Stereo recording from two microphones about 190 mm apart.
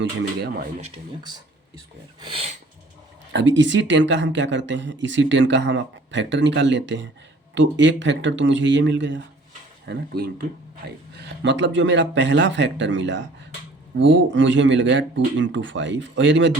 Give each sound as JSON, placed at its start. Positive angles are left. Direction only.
{"t": 0.0, "sound": "speech", "side_deg": -65}
{"t": 2.2, "sound": "a sound", "side_deg": -30}
{"t": 3.3, "sound": "speech", "side_deg": -70}
{"t": 9.8, "sound": "speech", "side_deg": -60}